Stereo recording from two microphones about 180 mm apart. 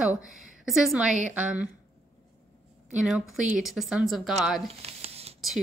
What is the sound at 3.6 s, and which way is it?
Speech, centre (ahead or behind).